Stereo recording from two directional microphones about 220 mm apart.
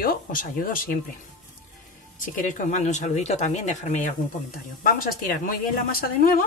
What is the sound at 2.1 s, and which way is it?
Speech, 35° left (ahead or behind).